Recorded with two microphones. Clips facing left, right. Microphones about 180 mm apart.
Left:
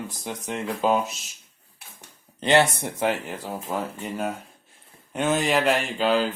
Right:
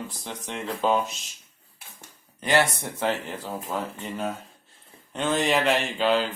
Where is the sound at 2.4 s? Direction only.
25° left (ahead or behind).